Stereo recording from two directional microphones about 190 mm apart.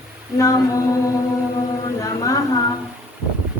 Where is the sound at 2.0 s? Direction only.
20° left (ahead or behind).